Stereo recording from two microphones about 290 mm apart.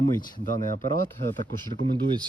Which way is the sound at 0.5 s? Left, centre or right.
Right.